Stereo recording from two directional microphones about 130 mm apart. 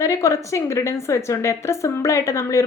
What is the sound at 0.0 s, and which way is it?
A woman's voice, 25° left (ahead or behind).